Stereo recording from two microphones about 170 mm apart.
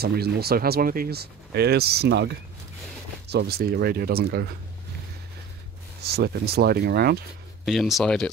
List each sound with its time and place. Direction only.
0.0 s speech: 70° right (ahead or behind)
6.0 s speech: 70° right (ahead or behind)
7.6 s speech: centre (ahead or behind)